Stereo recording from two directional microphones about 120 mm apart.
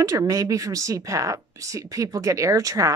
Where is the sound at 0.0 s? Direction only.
30° right (ahead or behind).